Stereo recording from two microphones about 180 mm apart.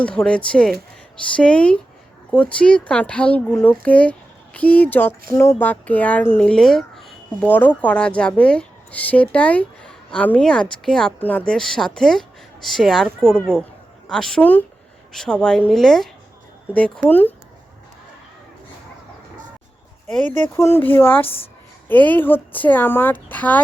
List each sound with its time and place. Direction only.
0.0 s a woman's voice: 5° left (ahead or behind)
17.1 s speech: 10° left (ahead or behind)
20.6 s speech: 15° left (ahead or behind)